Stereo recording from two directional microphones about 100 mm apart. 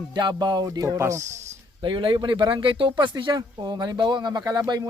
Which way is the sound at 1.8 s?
55° right (ahead or behind).